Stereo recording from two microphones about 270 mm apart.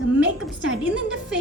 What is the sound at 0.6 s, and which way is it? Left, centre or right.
Speech, right.